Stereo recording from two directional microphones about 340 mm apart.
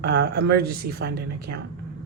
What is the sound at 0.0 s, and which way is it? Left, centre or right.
A woman's voice, right.